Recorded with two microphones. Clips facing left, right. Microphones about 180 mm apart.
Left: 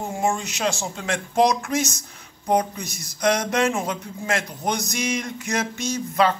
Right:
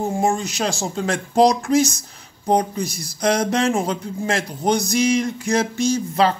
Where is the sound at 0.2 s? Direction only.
35° right (ahead or behind).